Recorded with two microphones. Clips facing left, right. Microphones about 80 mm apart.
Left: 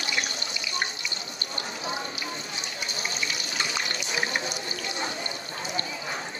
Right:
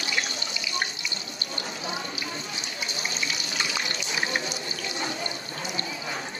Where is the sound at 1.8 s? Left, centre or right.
Left.